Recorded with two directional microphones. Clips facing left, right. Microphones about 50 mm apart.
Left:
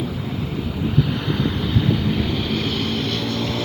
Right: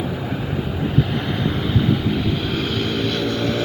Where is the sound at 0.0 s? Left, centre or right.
Right.